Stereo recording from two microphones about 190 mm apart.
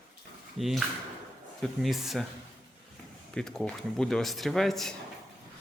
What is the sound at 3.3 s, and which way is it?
Speech, 5° left (ahead or behind).